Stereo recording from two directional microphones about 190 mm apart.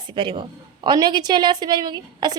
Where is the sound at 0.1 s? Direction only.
25° right (ahead or behind).